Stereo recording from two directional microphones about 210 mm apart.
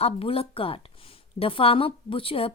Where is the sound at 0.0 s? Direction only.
25° left (ahead or behind).